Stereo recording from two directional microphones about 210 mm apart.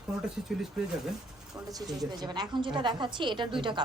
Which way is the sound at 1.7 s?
20° right (ahead or behind).